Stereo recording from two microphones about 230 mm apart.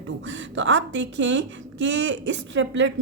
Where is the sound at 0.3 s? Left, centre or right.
Right.